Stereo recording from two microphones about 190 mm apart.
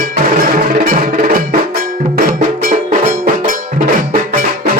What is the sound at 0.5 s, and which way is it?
Music, 45° right (ahead or behind).